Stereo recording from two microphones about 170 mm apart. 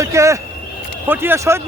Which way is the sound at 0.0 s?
20° right (ahead or behind).